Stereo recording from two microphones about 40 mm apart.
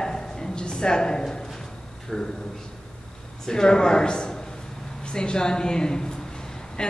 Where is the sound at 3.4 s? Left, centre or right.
Centre.